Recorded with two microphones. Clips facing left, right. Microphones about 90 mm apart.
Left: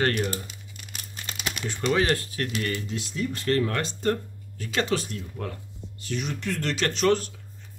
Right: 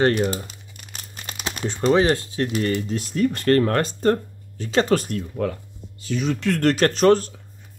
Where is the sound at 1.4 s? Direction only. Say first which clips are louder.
Right 6 dB; 30° right (ahead or behind).